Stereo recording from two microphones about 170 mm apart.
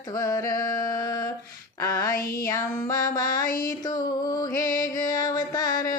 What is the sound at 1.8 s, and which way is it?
Music, 20° left (ahead or behind).